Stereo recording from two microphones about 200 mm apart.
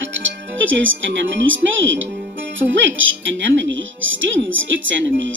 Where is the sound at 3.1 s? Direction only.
70° right (ahead or behind).